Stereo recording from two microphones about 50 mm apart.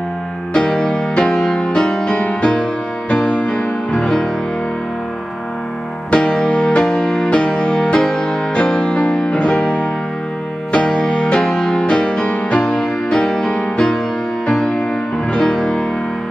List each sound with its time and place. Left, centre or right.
0.5 s music: centre
6.1 s music: centre